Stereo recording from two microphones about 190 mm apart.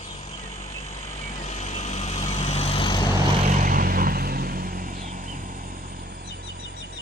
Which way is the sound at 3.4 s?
45° right (ahead or behind).